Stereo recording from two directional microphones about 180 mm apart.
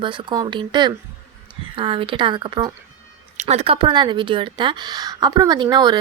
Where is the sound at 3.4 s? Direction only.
35° right (ahead or behind).